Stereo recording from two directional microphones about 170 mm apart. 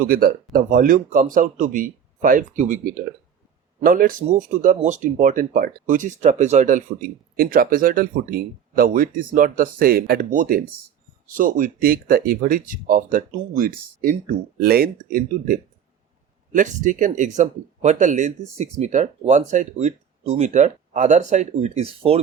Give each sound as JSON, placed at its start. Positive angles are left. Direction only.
{"t": 0.0, "sound": "speech", "side_deg": -60}
{"t": 7.3, "sound": "speech", "side_deg": -60}